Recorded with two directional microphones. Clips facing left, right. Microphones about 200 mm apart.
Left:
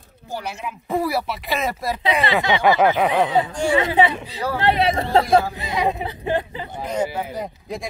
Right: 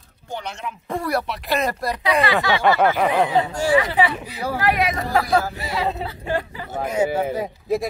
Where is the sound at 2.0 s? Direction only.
20° left (ahead or behind); by 3.3 s 5° left (ahead or behind).